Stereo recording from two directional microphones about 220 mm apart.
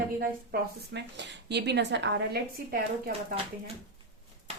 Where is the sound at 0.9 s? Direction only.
50° right (ahead or behind).